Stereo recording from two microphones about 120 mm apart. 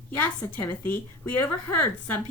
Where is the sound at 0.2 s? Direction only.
15° left (ahead or behind).